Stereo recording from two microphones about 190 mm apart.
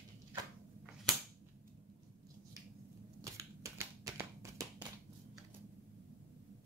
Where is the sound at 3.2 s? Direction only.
15° right (ahead or behind).